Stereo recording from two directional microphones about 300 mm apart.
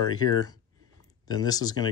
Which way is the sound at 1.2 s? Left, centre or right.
Centre.